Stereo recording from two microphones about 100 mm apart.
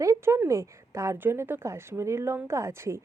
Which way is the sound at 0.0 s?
30° right (ahead or behind).